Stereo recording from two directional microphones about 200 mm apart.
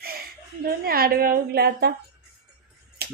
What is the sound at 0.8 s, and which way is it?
A woman's voice, 50° right (ahead or behind).